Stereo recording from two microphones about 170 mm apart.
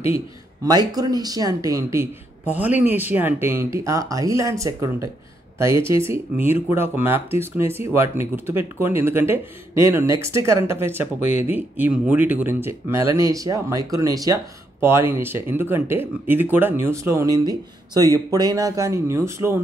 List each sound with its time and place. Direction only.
0.7 s speech: 20° right (ahead or behind)